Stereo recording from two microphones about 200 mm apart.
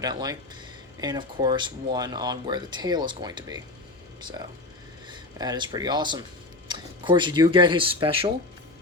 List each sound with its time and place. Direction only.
0.0 s speech: 20° right (ahead or behind)